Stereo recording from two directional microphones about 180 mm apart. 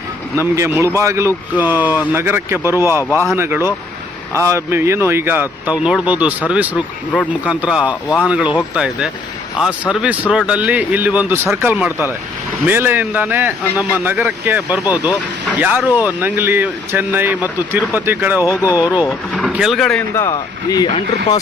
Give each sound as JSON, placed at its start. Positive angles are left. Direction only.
{"t": 0.3, "sound": "speech", "side_deg": -15}
{"t": 3.0, "sound": "speech", "side_deg": 15}
{"t": 3.3, "sound": "speech", "side_deg": -15}
{"t": 18.4, "sound": "speech", "side_deg": 20}
{"t": 19.0, "sound": "speech", "side_deg": 0}
{"t": 20.1, "sound": "speech", "side_deg": 20}